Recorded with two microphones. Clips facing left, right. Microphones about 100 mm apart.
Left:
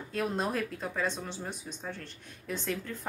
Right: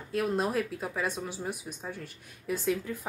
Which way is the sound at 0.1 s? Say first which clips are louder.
Right 3 dB; 5° right (ahead or behind).